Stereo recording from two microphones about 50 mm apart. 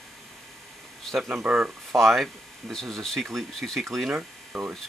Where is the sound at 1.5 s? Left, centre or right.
Right.